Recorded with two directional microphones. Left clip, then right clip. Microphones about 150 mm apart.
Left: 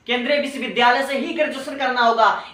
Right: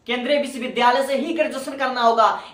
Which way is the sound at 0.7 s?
40° right (ahead or behind).